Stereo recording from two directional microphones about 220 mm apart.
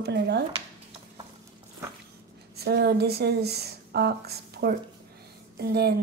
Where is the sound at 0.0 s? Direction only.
50° right (ahead or behind).